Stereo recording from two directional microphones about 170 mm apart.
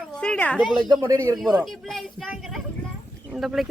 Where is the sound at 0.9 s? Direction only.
20° right (ahead or behind).